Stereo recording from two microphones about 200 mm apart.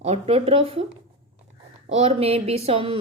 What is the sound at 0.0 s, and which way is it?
Speech, 30° right (ahead or behind).